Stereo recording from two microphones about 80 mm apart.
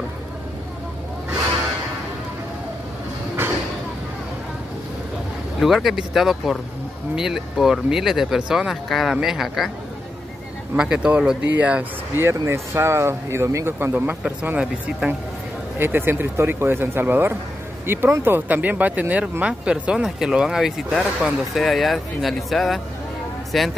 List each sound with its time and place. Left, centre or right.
5.6 s speech: centre
10.8 s speech: centre
12.2 s speech: right
15.8 s speech: right; by 23.7 s centre